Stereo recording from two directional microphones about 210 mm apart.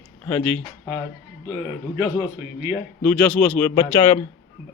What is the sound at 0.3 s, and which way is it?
Speech, 10° left (ahead or behind).